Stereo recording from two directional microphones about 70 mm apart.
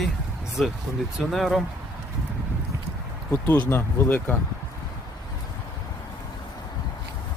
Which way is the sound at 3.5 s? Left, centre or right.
Left.